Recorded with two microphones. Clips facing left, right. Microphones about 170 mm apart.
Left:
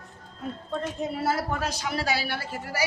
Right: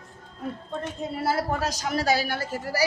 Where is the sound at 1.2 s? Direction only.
30° right (ahead or behind).